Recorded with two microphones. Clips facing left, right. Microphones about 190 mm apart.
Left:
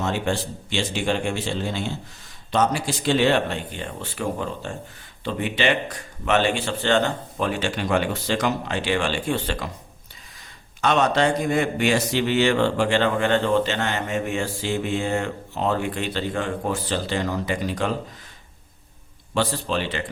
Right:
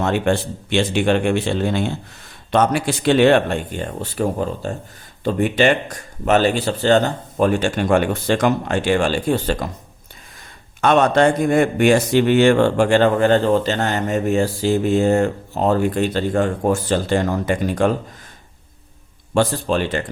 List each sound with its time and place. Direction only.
0.0 s a man's voice: 60° right (ahead or behind); by 9.6 s 40° right (ahead or behind)
10.8 s speech: 50° right (ahead or behind)
19.3 s speech: 50° right (ahead or behind)